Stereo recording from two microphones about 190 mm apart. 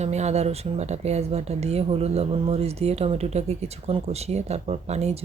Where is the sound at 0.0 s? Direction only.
35° right (ahead or behind).